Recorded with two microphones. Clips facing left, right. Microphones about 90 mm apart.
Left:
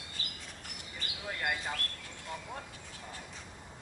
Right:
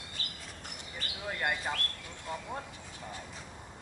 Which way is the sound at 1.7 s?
25° right (ahead or behind).